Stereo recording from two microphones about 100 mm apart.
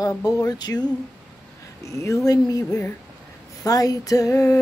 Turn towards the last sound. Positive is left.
turn(degrees=30)  # may be behind; listen again after turning